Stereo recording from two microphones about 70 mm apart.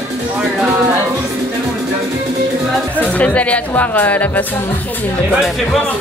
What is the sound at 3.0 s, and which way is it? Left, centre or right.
Speech, centre.